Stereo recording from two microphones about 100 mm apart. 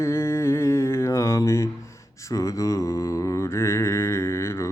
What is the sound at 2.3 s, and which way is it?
Mantra, 30° left (ahead or behind).